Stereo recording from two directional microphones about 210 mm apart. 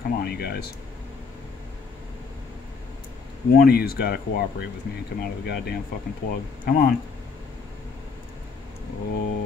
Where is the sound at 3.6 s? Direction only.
45° left (ahead or behind).